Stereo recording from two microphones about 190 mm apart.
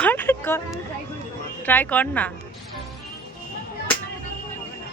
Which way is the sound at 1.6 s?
10° left (ahead or behind).